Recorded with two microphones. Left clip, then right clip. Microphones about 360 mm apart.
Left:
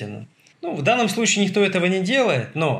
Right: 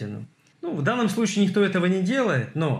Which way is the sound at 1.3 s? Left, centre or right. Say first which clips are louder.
Left 3 dB; left.